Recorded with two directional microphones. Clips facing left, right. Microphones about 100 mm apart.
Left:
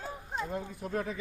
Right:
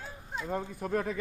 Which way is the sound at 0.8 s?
45° right (ahead or behind).